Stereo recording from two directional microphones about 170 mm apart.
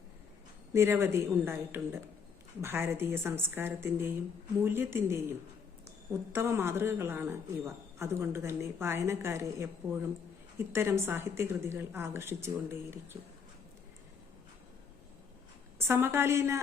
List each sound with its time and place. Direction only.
0.7 s a woman's voice: 15° right (ahead or behind)
6.3 s a woman's voice: 15° right (ahead or behind)
15.9 s a woman's voice: 15° right (ahead or behind)